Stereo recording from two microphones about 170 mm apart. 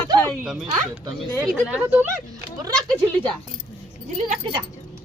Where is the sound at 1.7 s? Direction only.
10° right (ahead or behind).